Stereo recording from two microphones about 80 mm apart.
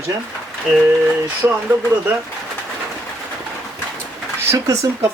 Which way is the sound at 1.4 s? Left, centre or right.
Right.